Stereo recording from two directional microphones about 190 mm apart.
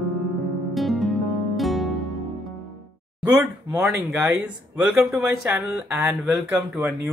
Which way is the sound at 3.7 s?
15° right (ahead or behind).